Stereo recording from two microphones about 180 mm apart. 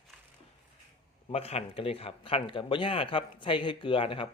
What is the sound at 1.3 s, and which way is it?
Speech, 35° left (ahead or behind).